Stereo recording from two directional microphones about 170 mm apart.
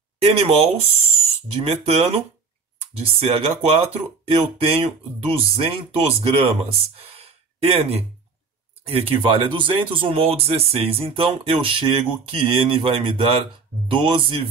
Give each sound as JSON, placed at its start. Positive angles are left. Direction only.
{"t": 0.4, "sound": "speech", "side_deg": -35}